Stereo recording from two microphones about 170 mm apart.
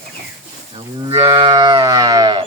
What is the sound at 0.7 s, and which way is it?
Cattle, 35° right (ahead or behind).